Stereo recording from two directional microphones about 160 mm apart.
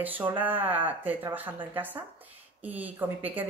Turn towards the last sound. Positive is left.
turn(degrees=-10)  # may be behind; listen again after turning